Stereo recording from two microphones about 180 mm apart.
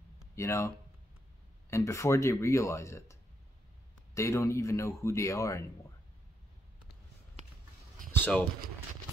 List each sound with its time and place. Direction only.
0.4 s speech: 15° left (ahead or behind)
8.1 s speech: 10° left (ahead or behind)